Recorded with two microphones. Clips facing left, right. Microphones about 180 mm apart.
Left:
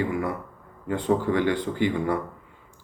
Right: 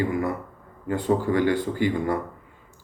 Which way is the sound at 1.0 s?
10° right (ahead or behind).